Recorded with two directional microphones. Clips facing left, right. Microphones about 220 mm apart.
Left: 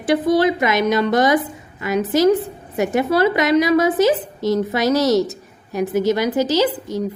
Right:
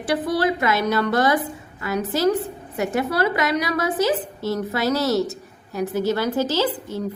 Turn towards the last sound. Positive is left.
turn(degrees=15)  # may be behind; listen again after turning